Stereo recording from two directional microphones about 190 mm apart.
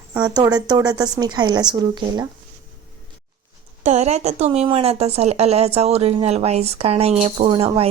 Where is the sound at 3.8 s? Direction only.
35° right (ahead or behind).